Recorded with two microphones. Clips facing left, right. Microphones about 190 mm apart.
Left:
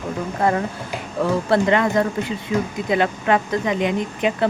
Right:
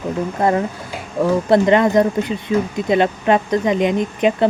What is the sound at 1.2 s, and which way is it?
Speech, 20° right (ahead or behind).